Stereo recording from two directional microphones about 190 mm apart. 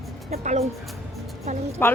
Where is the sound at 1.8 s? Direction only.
10° left (ahead or behind).